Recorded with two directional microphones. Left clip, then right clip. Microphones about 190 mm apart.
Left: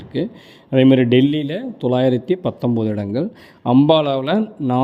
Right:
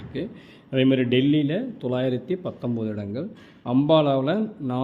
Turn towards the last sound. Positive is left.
turn(degrees=40)  # may be behind; listen again after turning